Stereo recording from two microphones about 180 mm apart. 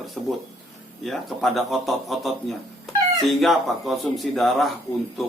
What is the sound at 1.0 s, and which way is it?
A man's voice, centre (ahead or behind).